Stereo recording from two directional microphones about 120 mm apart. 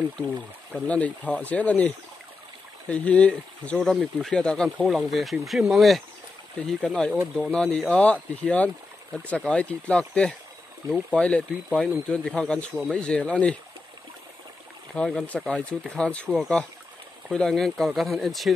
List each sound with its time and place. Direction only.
0.7 s speech: 10° left (ahead or behind)
15.0 s speech: 5° left (ahead or behind)